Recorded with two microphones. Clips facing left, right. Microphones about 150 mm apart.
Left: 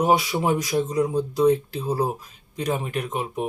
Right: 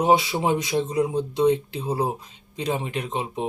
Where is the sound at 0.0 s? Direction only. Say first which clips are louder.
Right 1 dB; 25° right (ahead or behind).